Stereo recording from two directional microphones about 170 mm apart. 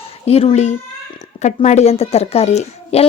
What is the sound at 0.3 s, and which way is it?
A child's voice, 35° left (ahead or behind).